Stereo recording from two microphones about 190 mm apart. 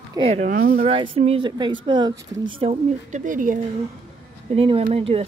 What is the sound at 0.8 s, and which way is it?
Speech, 30° right (ahead or behind).